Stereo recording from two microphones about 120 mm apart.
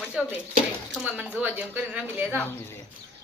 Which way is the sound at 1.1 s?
10° right (ahead or behind).